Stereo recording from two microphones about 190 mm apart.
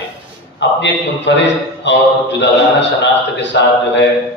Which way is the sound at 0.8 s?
70° left (ahead or behind).